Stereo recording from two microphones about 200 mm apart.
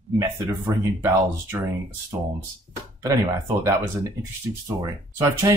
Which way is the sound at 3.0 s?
15° right (ahead or behind).